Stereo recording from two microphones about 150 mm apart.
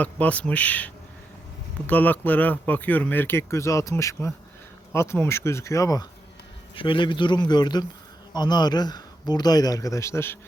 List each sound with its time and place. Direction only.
0.0 s speech: 10° left (ahead or behind)
1.9 s speech: 10° left (ahead or behind)
6.7 s speech: 35° left (ahead or behind); by 10.3 s 20° left (ahead or behind)